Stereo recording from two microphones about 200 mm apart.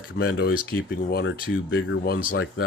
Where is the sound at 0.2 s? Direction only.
55° left (ahead or behind).